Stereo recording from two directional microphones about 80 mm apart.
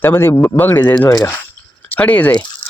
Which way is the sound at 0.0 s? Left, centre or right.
Left.